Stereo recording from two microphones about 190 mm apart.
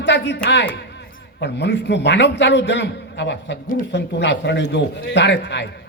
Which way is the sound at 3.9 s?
65° left (ahead or behind).